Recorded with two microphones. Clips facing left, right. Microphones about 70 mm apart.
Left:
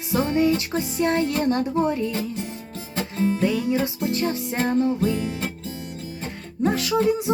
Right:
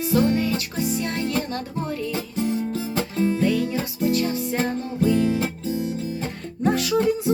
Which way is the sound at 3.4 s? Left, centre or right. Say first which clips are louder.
Right 1 dB; centre.